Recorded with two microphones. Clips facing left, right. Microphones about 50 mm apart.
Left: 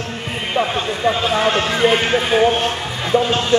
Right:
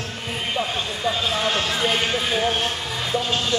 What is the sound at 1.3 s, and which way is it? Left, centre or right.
Speech, left.